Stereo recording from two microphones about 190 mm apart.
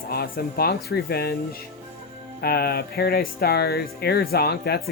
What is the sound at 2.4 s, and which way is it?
Speech, 55° left (ahead or behind).